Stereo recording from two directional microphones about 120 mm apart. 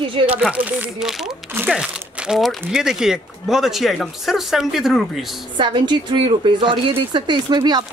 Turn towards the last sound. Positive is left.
turn(degrees=-35)  # may be behind; listen again after turning